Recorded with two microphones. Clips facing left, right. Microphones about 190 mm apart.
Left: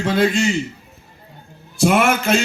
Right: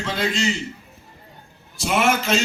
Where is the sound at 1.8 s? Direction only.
55° left (ahead or behind).